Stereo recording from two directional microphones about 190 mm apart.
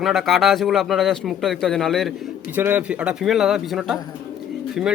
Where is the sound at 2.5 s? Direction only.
10° right (ahead or behind).